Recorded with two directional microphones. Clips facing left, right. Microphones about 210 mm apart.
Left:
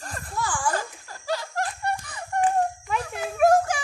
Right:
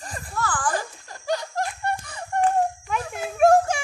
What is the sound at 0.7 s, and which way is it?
Laughter, 20° right (ahead or behind).